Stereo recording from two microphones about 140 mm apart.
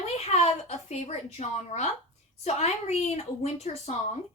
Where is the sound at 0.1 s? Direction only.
50° left (ahead or behind).